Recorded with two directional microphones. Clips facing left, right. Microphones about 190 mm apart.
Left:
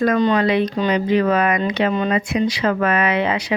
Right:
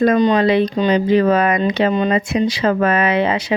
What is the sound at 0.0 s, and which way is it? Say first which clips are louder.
Speech: right 3 dB; 20° right (ahead or behind).